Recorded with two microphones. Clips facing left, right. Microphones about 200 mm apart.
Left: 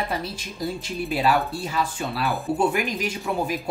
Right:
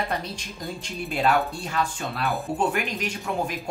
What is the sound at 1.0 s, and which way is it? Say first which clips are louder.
Speech: even; centre (ahead or behind).